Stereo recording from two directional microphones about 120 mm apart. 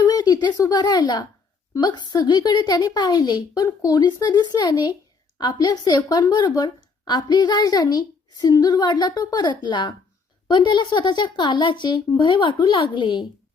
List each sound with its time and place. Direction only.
0.0 s a woman's voice: 30° left (ahead or behind)